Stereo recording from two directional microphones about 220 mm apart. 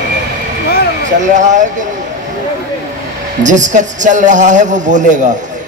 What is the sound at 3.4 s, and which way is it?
A man's voice, 35° right (ahead or behind).